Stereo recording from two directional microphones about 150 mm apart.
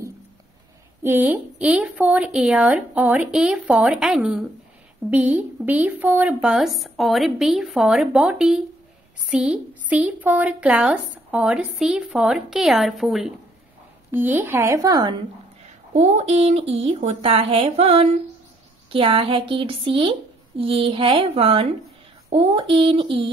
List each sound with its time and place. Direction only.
1.0 s a woman's voice: 10° right (ahead or behind)
14.1 s speech: 15° right (ahead or behind)
15.6 s speech: 50° right (ahead or behind)